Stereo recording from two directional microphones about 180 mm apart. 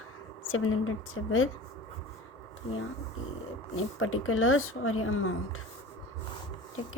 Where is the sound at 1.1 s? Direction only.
90° left.